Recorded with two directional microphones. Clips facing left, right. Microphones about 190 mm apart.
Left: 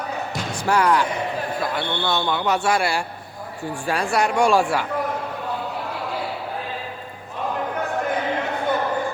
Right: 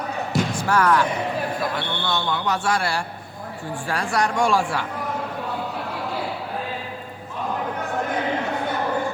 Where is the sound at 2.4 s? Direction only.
15° left (ahead or behind).